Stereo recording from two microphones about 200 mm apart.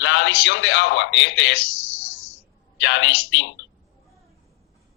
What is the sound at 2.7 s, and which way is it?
Speech, 65° left (ahead or behind).